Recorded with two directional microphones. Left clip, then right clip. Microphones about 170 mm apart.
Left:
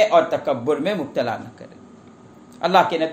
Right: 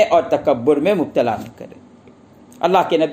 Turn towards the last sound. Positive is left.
turn(degrees=-40)  # may be behind; listen again after turning